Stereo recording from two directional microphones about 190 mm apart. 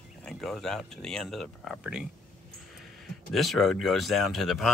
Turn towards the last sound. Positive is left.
turn(degrees=0)  # may be behind; listen again after turning